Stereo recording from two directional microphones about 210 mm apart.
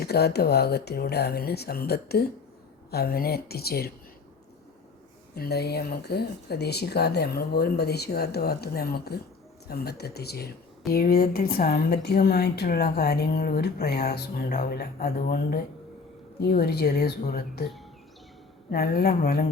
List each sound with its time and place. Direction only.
0.0 s a woman's voice: 50° left (ahead or behind)
5.3 s a woman's voice: 50° left (ahead or behind)
18.7 s a woman's voice: 45° left (ahead or behind)